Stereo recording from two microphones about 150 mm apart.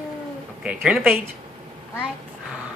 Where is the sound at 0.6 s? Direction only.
5° right (ahead or behind).